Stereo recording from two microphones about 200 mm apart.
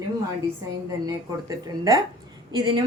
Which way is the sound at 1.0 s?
15° right (ahead or behind).